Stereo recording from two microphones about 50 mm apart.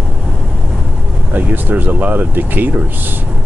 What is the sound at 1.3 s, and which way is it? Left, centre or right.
Speech, right.